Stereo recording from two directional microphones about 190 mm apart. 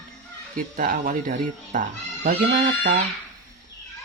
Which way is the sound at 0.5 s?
50° right (ahead or behind).